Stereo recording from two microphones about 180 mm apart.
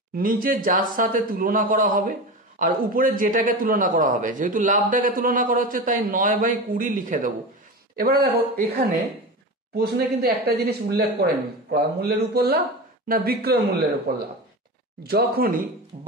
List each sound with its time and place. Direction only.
0.1 s a man's voice: 50° right (ahead or behind)